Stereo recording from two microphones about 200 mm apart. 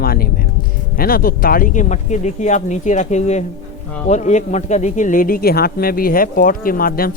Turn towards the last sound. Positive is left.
turn(degrees=45)  # may be behind; listen again after turning